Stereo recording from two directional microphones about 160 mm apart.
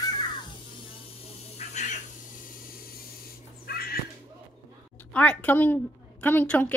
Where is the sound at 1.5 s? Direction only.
45° left (ahead or behind).